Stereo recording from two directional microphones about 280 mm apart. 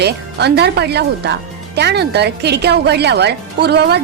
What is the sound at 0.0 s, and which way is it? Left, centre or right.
A woman's voice, right.